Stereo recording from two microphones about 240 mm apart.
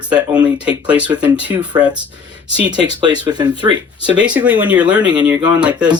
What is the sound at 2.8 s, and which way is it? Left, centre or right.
Speech, centre.